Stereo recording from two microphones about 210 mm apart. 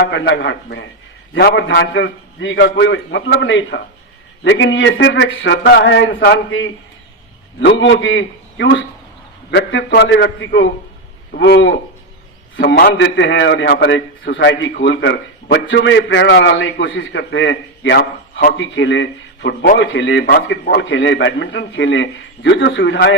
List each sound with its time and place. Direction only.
0.1 s a man's voice: 55° left (ahead or behind)